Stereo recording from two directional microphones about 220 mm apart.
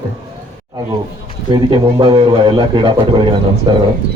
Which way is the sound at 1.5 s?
20° right (ahead or behind).